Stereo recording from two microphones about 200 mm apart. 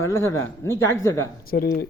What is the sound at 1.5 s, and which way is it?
Speech, 55° left (ahead or behind).